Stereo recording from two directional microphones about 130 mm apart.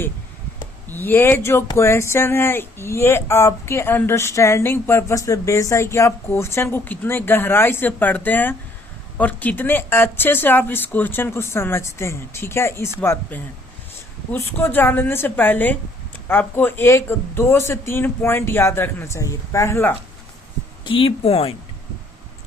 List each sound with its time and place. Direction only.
0.9 s speech: 15° left (ahead or behind)
20.8 s speech: 45° left (ahead or behind)